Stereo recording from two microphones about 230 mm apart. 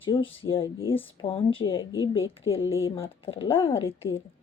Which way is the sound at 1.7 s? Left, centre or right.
Left.